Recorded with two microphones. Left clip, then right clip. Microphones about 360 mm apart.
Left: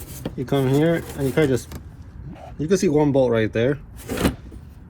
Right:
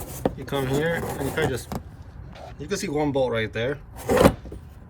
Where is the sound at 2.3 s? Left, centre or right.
Centre.